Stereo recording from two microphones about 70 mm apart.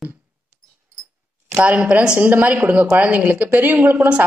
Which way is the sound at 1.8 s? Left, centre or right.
Centre.